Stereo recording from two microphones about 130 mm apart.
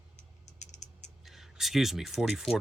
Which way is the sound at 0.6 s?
65° left (ahead or behind).